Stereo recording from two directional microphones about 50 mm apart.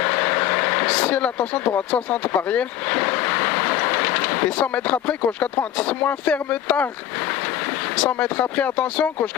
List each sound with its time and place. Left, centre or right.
0.0 s vehicle: left
0.9 s speech: left
1.9 s vehicle: left
4.4 s speech: left
8.0 s speech: left